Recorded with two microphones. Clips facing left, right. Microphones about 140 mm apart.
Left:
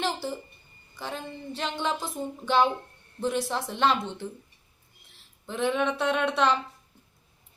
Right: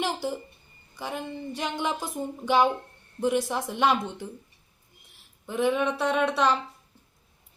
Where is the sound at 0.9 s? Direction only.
15° right (ahead or behind).